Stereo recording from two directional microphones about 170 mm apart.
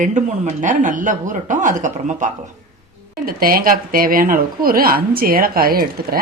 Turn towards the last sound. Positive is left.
turn(degrees=-60)  # may be behind; listen again after turning